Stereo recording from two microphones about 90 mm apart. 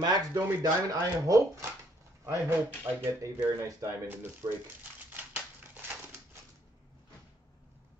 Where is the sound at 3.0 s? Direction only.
35° right (ahead or behind).